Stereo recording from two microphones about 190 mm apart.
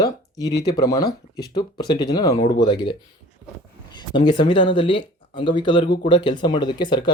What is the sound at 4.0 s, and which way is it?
Speech, 25° left (ahead or behind).